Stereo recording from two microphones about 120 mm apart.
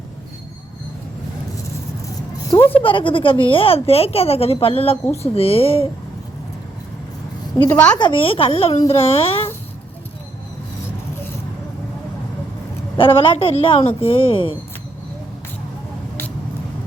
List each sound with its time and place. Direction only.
2.8 s speech: 45° left (ahead or behind)
7.7 s a woman's voice: 10° left (ahead or behind)
7.9 s speech: 45° left (ahead or behind)
13.0 s speech: 45° left (ahead or behind)